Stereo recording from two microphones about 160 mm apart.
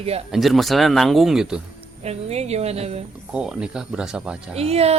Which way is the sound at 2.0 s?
40° right (ahead or behind).